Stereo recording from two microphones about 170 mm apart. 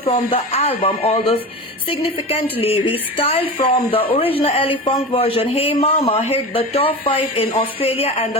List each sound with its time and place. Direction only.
0.0 s a woman's voice: 35° left (ahead or behind)